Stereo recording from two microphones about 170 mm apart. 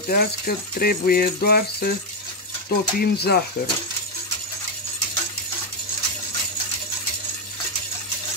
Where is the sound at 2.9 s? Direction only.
65° left (ahead or behind).